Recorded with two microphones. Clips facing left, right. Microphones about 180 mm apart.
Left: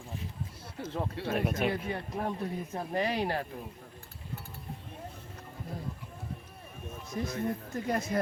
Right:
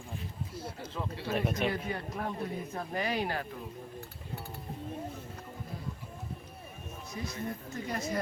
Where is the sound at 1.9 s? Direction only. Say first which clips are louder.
Left 2 dB; 25° left (ahead or behind).